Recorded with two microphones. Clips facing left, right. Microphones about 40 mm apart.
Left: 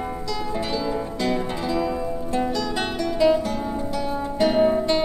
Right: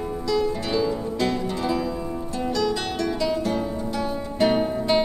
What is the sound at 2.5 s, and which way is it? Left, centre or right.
Music, centre.